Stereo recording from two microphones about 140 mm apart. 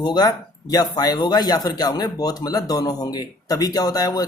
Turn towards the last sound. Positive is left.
turn(degrees=25)  # may be behind; listen again after turning